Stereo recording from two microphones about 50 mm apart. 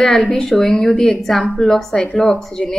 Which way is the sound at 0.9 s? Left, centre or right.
Centre.